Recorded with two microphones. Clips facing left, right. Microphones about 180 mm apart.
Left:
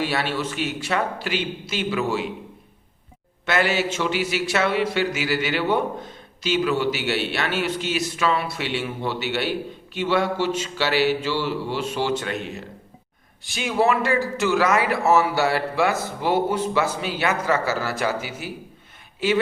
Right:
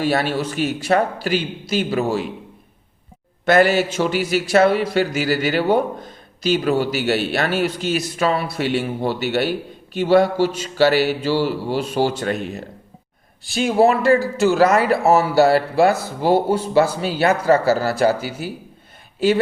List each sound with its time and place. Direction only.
0.0 s speech: 45° right (ahead or behind)
3.4 s speech: 40° right (ahead or behind)